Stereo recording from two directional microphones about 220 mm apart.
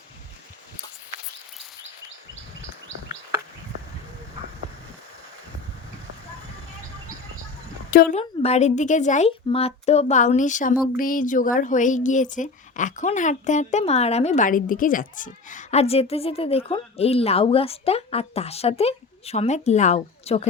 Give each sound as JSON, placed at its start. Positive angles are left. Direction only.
{"t": 7.9, "sound": "speech", "side_deg": 40}
{"t": 8.2, "sound": "speech", "side_deg": 25}